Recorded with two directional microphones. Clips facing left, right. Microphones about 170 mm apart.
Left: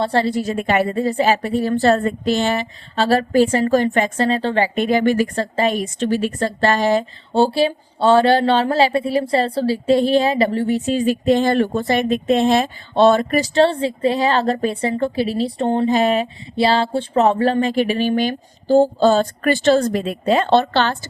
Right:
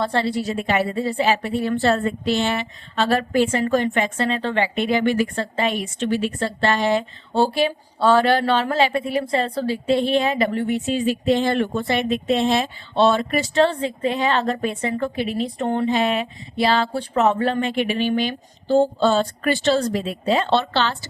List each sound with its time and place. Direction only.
0.0 s speech: 40° left (ahead or behind)
7.3 s speech: 30° left (ahead or behind)
15.9 s speech: 40° left (ahead or behind)